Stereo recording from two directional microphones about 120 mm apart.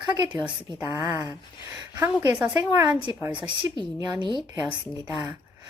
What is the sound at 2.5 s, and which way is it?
Speech, 35° right (ahead or behind).